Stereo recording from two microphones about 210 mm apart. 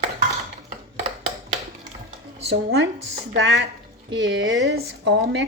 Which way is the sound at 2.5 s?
50° right (ahead or behind).